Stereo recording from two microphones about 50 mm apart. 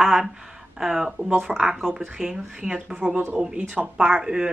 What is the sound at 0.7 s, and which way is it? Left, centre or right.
Speech, centre.